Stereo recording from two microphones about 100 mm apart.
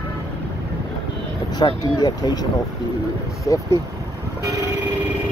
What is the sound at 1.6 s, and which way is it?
Speech, 55° left (ahead or behind).